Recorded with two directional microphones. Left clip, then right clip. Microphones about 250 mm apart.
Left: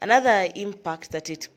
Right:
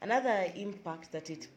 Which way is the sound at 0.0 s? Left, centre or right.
Left.